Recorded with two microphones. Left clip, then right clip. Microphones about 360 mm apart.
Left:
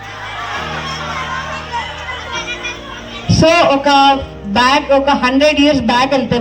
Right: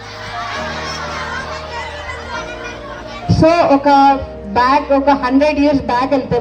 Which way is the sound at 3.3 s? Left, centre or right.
Centre.